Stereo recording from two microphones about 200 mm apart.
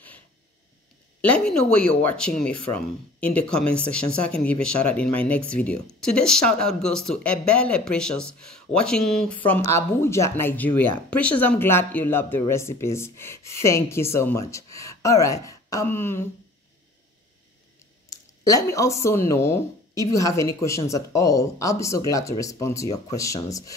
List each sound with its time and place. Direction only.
1.2 s speech: 5° left (ahead or behind)
9.5 s speech: 15° left (ahead or behind)
18.1 s speech: 15° left (ahead or behind)